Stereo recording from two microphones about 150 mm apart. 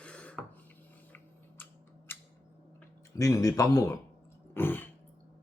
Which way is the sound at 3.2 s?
20° left (ahead or behind).